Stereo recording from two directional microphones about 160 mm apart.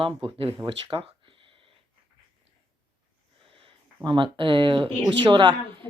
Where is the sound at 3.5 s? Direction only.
30° right (ahead or behind).